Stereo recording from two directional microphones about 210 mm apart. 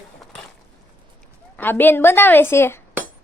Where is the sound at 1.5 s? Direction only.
10° left (ahead or behind).